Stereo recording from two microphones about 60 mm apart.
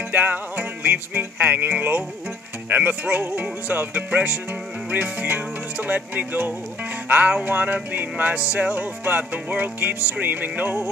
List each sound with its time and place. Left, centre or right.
0.1 s music: right